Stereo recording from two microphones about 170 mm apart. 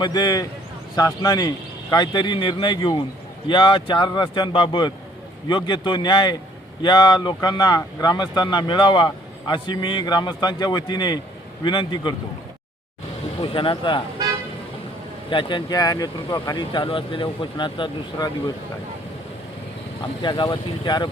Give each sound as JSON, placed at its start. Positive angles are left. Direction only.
{"t": 0.0, "sound": "speech", "side_deg": 25}
{"t": 13.4, "sound": "speech", "side_deg": 30}
{"t": 15.3, "sound": "speech", "side_deg": 30}
{"t": 20.2, "sound": "speech", "side_deg": 25}